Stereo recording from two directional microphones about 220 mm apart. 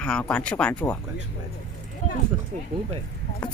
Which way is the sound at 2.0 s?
35° left (ahead or behind).